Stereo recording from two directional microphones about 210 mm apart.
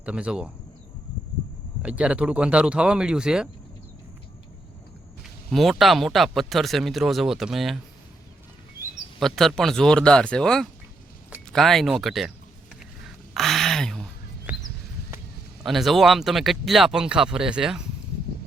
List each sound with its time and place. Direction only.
0.0 s speech: 5° right (ahead or behind)
1.8 s speech: 5° right (ahead or behind)
5.5 s speech: centre (ahead or behind)
9.2 s speech: centre (ahead or behind)
13.3 s a sound: centre (ahead or behind)
15.6 s speech: centre (ahead or behind)